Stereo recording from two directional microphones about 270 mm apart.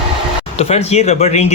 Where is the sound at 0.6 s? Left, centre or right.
Left.